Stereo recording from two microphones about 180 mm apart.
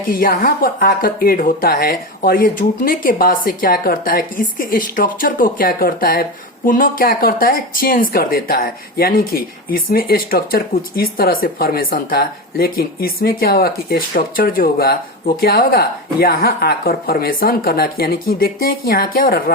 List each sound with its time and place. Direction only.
0.1 s a woman's voice: 55° left (ahead or behind)